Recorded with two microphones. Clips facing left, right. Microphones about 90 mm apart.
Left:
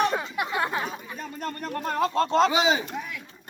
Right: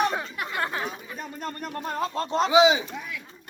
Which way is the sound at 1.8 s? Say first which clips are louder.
Left 5 dB; 80° left.